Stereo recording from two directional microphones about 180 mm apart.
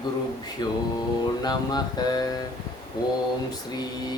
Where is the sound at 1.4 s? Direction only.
20° left (ahead or behind).